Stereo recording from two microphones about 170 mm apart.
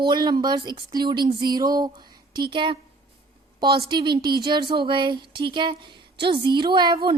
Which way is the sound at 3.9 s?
25° right (ahead or behind).